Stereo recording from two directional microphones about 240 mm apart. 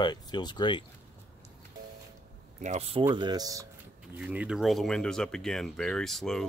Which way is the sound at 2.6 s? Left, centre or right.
Right.